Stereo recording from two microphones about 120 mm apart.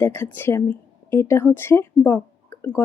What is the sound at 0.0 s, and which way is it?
Speech, 20° left (ahead or behind).